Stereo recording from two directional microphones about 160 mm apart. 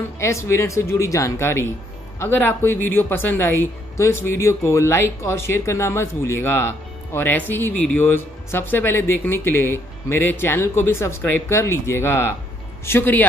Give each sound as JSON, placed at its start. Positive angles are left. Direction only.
{"t": 0.2, "sound": "speech", "side_deg": 20}